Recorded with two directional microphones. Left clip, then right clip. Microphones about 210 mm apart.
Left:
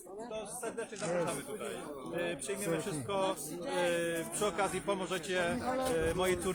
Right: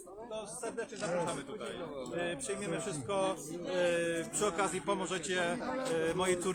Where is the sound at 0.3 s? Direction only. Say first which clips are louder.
Right 1 dB; 5° left (ahead or behind).